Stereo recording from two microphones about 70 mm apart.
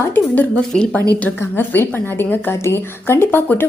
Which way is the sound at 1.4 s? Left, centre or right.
Left.